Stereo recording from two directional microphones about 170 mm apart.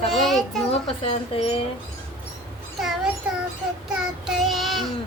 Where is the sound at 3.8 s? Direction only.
Centre (ahead or behind).